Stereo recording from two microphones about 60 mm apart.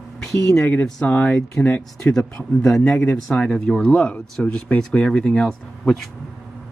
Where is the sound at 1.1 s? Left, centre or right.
Left.